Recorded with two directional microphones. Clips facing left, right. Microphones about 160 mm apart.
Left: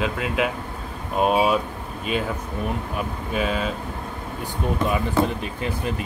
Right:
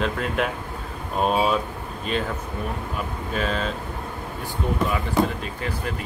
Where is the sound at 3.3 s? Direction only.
10° left (ahead or behind).